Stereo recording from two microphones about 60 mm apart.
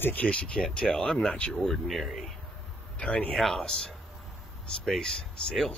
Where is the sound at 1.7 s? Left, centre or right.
Centre.